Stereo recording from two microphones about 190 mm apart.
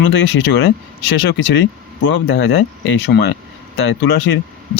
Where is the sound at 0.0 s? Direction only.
70° left (ahead or behind).